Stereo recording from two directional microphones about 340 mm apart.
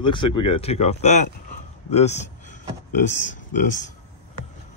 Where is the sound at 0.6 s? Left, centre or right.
Centre.